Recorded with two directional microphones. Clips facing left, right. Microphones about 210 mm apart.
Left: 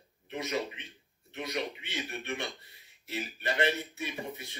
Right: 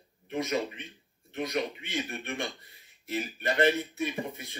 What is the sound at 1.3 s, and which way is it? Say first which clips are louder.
Speech: right 4 dB; 50° right (ahead or behind).